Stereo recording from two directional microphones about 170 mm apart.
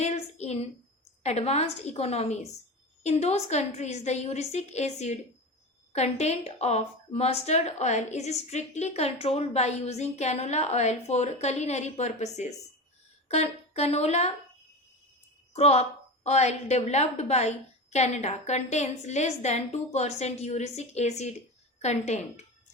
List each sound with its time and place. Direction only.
0.0 s a sound: 40° left (ahead or behind)
1.2 s a woman's voice: 40° left (ahead or behind)
15.5 s a woman's voice: 40° left (ahead or behind)